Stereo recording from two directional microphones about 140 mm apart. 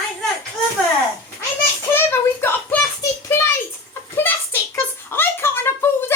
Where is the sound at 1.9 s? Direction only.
15° left (ahead or behind).